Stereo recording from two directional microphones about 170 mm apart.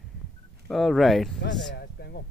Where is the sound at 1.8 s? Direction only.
65° left (ahead or behind).